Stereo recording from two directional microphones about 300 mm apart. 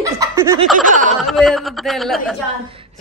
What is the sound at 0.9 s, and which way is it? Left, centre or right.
Speech, right.